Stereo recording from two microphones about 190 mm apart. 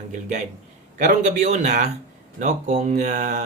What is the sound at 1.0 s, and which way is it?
Speech, 40° right (ahead or behind).